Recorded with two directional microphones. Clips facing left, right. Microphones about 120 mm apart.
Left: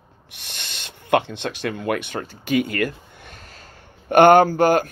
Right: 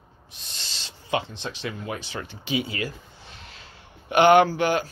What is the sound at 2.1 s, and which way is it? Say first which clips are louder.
Speech: left 6 dB; 45° left (ahead or behind).